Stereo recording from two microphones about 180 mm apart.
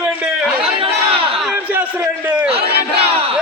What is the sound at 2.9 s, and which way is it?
Battle cry, 35° right (ahead or behind).